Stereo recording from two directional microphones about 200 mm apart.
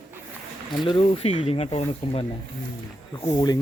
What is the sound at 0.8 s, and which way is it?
Speech, 30° left (ahead or behind).